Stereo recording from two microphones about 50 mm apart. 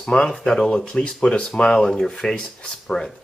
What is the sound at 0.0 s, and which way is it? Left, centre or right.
Speech, centre.